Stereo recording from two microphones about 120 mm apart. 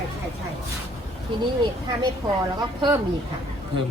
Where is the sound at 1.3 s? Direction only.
40° right (ahead or behind).